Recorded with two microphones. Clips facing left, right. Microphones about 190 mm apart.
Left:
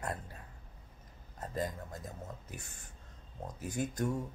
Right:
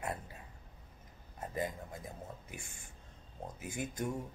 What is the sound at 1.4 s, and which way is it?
Speech, 10° right (ahead or behind).